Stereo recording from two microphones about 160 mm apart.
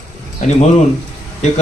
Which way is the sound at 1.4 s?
50° left (ahead or behind).